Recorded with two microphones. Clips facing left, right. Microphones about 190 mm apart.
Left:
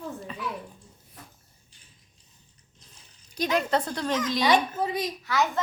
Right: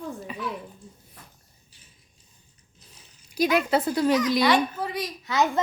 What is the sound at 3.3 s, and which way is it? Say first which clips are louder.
A child's voice: right 3 dB; 10° right (ahead or behind).